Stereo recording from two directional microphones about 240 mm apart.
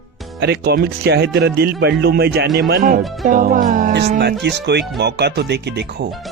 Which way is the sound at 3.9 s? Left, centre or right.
Right.